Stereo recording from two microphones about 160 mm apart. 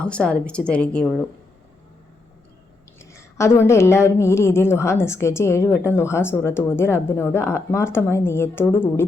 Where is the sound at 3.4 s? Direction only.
15° left (ahead or behind).